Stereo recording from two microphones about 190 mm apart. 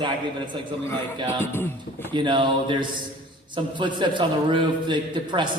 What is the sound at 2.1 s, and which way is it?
A man's voice, 25° right (ahead or behind).